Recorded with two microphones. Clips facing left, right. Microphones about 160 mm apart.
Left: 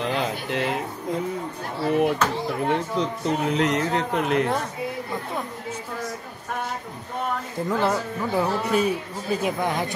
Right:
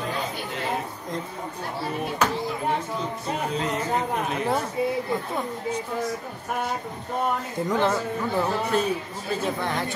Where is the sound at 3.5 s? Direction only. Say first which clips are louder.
Left 2 dB; 80° left.